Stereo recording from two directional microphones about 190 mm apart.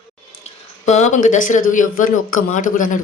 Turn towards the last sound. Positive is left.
turn(degrees=45)  # may be behind; listen again after turning